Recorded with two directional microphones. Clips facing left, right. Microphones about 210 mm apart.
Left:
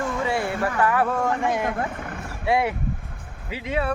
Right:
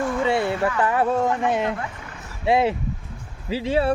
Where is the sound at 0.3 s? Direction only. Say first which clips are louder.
Right 5 dB; 25° right (ahead or behind).